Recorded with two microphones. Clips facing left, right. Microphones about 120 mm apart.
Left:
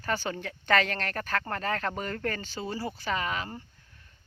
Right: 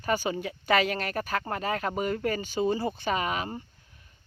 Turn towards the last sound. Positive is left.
turn(degrees=-20)  # may be behind; listen again after turning